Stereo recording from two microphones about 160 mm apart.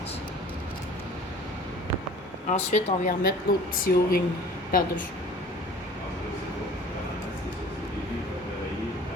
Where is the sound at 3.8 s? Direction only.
65° left (ahead or behind).